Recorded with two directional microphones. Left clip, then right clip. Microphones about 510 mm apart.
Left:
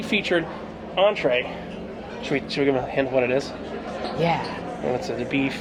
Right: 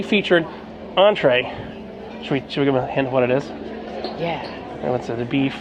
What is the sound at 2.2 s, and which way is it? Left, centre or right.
Speech, right.